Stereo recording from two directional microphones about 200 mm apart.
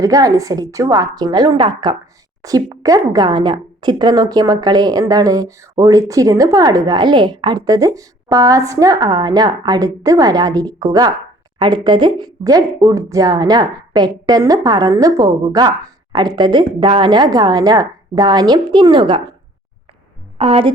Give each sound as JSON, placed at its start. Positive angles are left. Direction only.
{"t": 0.0, "sound": "a woman's voice", "side_deg": -15}
{"t": 20.4, "sound": "a woman's voice", "side_deg": -30}